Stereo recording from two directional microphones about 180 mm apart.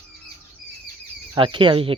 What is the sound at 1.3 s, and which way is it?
Speech, 30° right (ahead or behind).